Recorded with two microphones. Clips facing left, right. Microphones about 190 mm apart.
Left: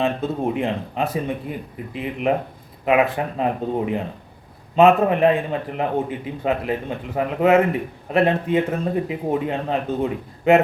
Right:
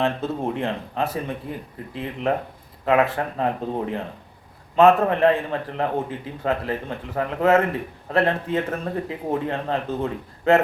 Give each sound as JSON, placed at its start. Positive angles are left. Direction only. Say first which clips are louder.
{"t": 0.0, "sound": "a man's voice", "louder": "left 2 dB", "side_deg": 15}